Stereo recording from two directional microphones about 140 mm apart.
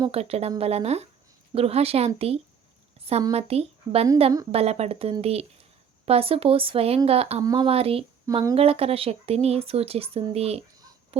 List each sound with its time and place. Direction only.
0.1 s speech: 45° right (ahead or behind)
7.4 s speech: 35° right (ahead or behind)
11.1 s honk: 45° right (ahead or behind)